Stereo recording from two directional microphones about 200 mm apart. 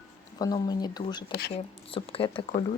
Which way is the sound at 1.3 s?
55° left (ahead or behind).